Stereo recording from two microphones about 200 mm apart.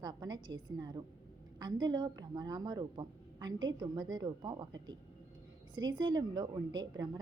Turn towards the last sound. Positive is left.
turn(degrees=-20)  # may be behind; listen again after turning